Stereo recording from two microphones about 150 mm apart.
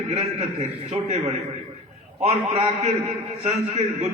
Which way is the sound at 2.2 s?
50° right (ahead or behind).